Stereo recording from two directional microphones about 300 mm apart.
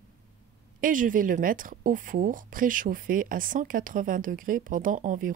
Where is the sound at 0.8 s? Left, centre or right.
Right.